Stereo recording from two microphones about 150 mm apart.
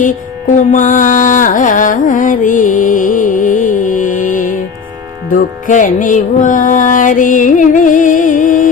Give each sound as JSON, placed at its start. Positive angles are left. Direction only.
{"t": 0.5, "sound": "carnatic music", "side_deg": 60}
{"t": 5.3, "sound": "music", "side_deg": 60}